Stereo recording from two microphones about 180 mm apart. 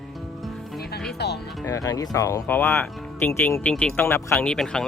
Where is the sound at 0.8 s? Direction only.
60° left (ahead or behind).